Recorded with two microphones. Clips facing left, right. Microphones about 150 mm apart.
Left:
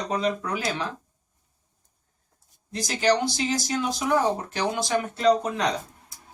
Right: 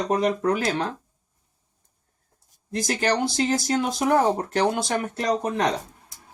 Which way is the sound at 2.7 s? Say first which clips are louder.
Left 1 dB; 50° right (ahead or behind).